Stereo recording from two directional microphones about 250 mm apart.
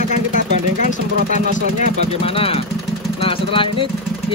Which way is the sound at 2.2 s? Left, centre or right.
Left.